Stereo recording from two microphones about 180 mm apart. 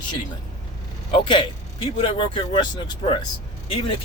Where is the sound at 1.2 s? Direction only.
30° left (ahead or behind).